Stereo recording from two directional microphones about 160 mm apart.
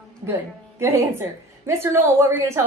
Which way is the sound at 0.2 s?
15° right (ahead or behind).